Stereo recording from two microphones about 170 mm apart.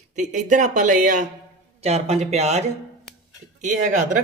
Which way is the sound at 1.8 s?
40° right (ahead or behind).